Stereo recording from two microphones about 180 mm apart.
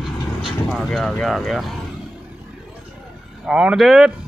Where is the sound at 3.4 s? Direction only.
5° right (ahead or behind).